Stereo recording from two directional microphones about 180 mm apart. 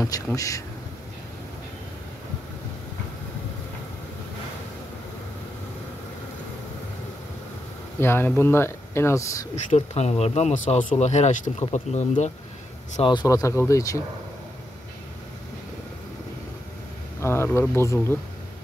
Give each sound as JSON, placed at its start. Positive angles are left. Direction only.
{"t": 0.0, "sound": "speech", "side_deg": 15}
{"t": 8.0, "sound": "speech", "side_deg": 10}
{"t": 9.7, "sound": "speech", "side_deg": 40}
{"t": 12.9, "sound": "speech", "side_deg": 25}
{"t": 17.2, "sound": "speech", "side_deg": 15}